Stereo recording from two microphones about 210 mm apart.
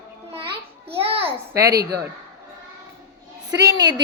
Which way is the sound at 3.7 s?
15° right (ahead or behind).